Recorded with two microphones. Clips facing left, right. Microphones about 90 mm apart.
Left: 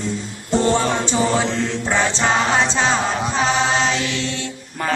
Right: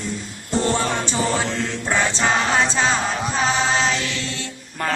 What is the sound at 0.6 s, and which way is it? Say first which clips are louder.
Music: left 3 dB; 15° left (ahead or behind).